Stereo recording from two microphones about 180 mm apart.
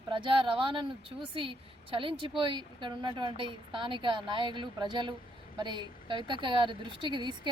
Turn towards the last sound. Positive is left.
turn(degrees=-25)  # may be behind; listen again after turning